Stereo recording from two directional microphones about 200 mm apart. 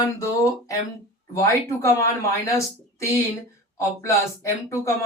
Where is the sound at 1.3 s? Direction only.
15° left (ahead or behind).